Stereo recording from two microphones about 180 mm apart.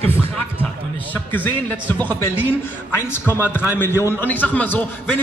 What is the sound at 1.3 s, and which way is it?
A man's voice, 10° left (ahead or behind).